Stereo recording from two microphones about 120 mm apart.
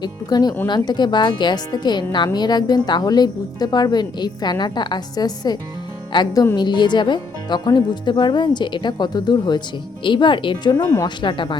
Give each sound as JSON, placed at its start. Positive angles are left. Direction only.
{"t": 0.0, "sound": "a woman's voice", "side_deg": 35}
{"t": 10.8, "sound": "speech", "side_deg": 15}
{"t": 11.0, "sound": "a woman's voice", "side_deg": 40}